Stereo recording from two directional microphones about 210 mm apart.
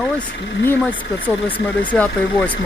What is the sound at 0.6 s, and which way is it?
Speech, 10° left (ahead or behind).